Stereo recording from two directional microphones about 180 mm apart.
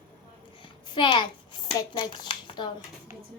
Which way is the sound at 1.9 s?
25° left (ahead or behind).